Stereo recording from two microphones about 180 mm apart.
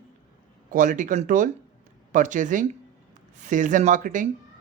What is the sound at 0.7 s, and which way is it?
Speech, 45° right (ahead or behind).